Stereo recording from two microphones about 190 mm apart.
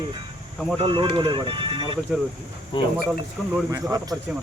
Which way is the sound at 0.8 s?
25° right (ahead or behind).